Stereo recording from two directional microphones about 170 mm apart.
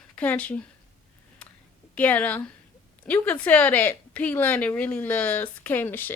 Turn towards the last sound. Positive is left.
turn(degrees=10)  # may be behind; listen again after turning